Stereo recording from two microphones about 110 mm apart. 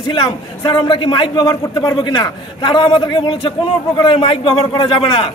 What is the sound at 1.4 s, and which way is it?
A man's voice, 30° left (ahead or behind).